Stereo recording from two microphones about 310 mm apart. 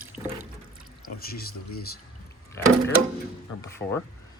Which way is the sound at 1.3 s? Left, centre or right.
Left.